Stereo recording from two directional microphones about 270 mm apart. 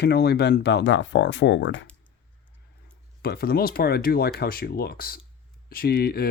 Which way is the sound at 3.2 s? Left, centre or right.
Left.